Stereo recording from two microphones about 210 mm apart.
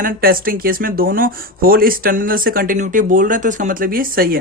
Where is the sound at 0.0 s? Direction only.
45° right (ahead or behind).